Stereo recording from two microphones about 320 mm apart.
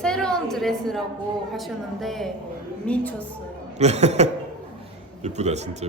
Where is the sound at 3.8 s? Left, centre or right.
Centre.